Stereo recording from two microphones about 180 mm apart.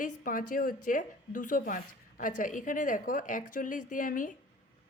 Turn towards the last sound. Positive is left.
turn(degrees=45)  # may be behind; listen again after turning